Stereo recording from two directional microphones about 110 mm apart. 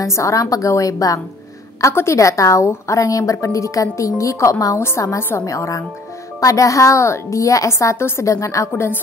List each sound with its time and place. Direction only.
0.0 s a woman's voice: 30° left (ahead or behind)